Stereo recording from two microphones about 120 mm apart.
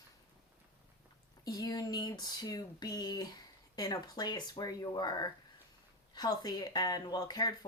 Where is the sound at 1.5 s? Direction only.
30° left (ahead or behind).